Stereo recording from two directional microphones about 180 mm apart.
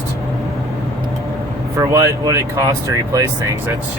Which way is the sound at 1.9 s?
20° right (ahead or behind).